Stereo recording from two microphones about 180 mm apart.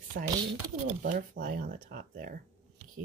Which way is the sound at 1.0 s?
45° right (ahead or behind).